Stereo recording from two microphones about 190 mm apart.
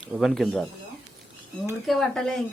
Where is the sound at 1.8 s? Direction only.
Centre (ahead or behind).